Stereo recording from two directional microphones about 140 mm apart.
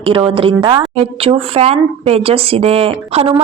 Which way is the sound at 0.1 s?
40° right (ahead or behind).